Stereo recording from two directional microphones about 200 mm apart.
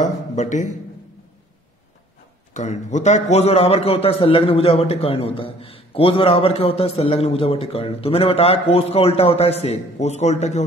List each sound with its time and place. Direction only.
0.0 s a man's voice: 35° left (ahead or behind)
2.5 s a man's voice: 35° left (ahead or behind)